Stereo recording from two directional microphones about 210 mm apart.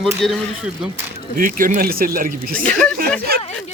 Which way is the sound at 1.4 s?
40° right (ahead or behind).